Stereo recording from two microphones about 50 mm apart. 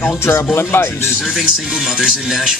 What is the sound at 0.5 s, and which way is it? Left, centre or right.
Speech, left.